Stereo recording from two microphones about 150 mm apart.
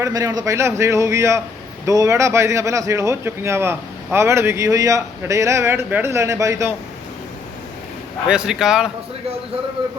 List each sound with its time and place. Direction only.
0.0 s speech: 25° right (ahead or behind)
8.3 s speech: 5° right (ahead or behind)